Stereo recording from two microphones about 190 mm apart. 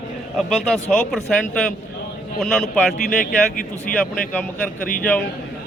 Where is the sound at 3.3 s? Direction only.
45° left (ahead or behind).